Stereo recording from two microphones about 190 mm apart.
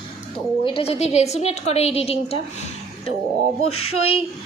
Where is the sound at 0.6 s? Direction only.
30° left (ahead or behind).